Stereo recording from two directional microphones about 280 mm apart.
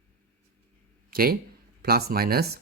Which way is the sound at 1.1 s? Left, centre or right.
Right.